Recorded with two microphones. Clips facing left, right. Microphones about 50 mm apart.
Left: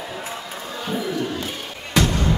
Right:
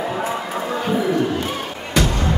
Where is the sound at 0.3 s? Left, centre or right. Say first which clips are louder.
Right 8 dB; right.